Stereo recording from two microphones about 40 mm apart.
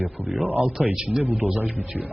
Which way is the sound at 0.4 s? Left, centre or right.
Right.